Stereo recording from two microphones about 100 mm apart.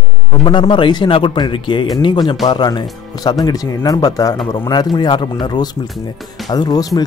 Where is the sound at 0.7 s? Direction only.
50° left (ahead or behind).